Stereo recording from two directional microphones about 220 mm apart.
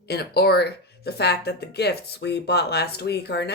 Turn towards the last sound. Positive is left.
turn(degrees=50)  # may be behind; listen again after turning